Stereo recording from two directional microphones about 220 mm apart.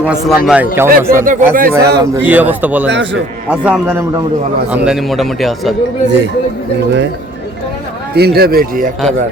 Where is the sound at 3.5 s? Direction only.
5° right (ahead or behind).